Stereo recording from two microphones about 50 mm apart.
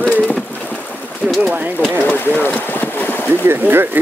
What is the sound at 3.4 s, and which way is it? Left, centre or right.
Speech, right.